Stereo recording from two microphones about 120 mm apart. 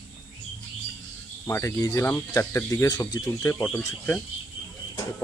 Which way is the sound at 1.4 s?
20° left (ahead or behind).